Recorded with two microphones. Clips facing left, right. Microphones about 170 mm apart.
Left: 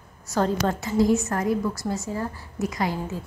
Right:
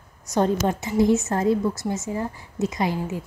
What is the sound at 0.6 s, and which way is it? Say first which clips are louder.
A woman's voice: right 1 dB; 20° right (ahead or behind).